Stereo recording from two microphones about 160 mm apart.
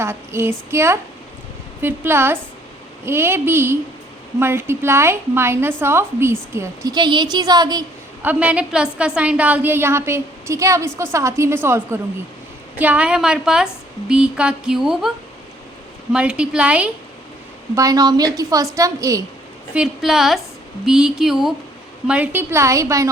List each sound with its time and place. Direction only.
0.0 s a woman's voice: 15° right (ahead or behind)
8.2 s a woman's voice: 10° right (ahead or behind)
16.1 s a woman's voice: 5° right (ahead or behind)
17.7 s a woman's voice: 20° right (ahead or behind)
19.7 s a woman's voice: 5° right (ahead or behind); by 23.0 s 20° right (ahead or behind)